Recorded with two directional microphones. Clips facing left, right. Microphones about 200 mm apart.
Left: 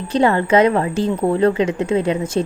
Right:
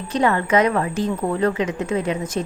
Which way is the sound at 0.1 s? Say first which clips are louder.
Left 4 dB; 30° left (ahead or behind).